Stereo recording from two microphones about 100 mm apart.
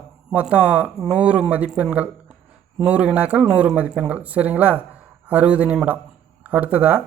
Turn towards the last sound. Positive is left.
turn(degrees=-15)  # may be behind; listen again after turning